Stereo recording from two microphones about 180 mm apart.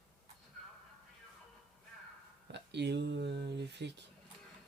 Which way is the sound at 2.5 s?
70° right (ahead or behind).